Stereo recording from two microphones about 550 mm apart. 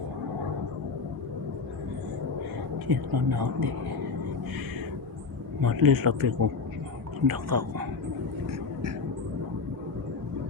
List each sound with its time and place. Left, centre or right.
2.8 s speech: right
5.6 s speech: right